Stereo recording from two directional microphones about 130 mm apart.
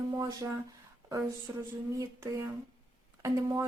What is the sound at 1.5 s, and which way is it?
Speech, 25° right (ahead or behind).